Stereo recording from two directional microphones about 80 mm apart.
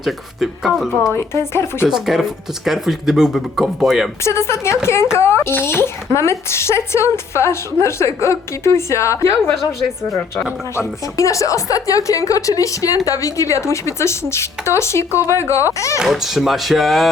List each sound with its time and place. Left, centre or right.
0.0 s speech: centre
1.1 s a woman's voice: left
1.9 s speech: centre
4.2 s a woman's voice: left
16.0 s speech: centre